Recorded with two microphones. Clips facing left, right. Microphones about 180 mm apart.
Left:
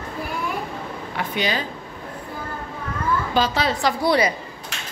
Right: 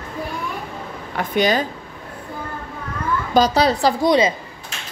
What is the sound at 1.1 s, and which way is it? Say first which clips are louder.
Speech: right 7 dB; 45° right (ahead or behind).